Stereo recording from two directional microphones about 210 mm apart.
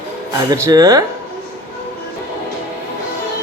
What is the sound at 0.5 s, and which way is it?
Speech, 15° right (ahead or behind).